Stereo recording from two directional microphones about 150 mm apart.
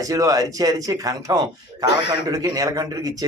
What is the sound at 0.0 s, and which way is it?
A man's voice, 25° right (ahead or behind).